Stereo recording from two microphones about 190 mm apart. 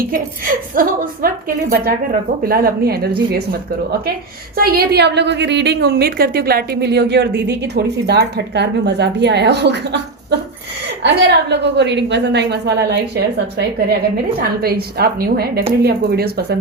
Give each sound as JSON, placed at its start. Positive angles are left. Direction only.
{"t": 0.1, "sound": "speech", "side_deg": -45}
{"t": 4.5, "sound": "a woman's voice", "side_deg": -55}